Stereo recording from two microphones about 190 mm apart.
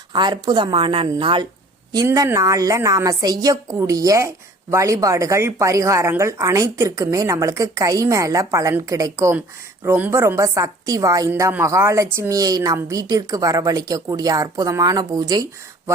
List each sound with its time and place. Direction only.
0.1 s speech: 20° right (ahead or behind)